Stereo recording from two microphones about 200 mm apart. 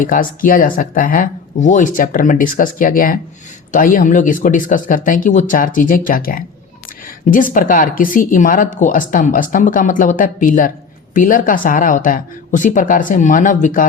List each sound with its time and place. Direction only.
0.0 s speech: 45° left (ahead or behind)